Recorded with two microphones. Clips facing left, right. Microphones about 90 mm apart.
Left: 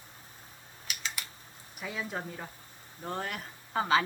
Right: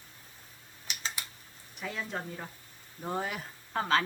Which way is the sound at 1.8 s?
5° left (ahead or behind).